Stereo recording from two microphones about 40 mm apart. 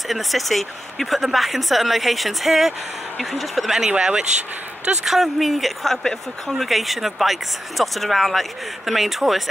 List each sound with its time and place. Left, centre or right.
0.1 s speech: centre
3.9 s speech: right
5.0 s speech: centre